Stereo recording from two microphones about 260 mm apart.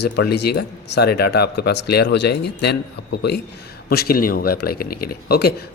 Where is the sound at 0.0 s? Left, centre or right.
Left.